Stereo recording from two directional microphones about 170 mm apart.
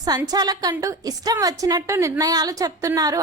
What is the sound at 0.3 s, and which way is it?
A woman's voice, 25° right (ahead or behind).